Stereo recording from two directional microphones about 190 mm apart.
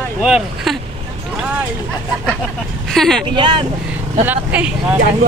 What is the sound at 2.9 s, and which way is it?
Speech, centre (ahead or behind).